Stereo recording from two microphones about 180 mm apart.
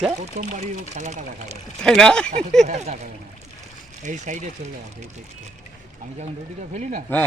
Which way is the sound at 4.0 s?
45° right (ahead or behind).